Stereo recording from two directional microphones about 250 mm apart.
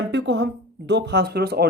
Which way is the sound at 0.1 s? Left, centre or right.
Right.